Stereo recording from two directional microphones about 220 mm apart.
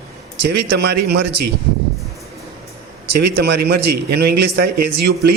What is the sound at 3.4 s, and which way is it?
A man's voice, 50° right (ahead or behind).